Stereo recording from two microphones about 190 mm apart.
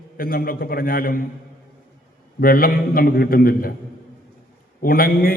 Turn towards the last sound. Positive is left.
turn(degrees=50)  # may be behind; listen again after turning